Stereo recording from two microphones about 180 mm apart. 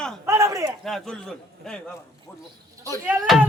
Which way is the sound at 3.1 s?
Centre (ahead or behind).